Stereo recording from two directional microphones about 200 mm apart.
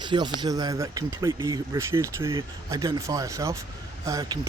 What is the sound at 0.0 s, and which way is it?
A man's voice, 25° right (ahead or behind).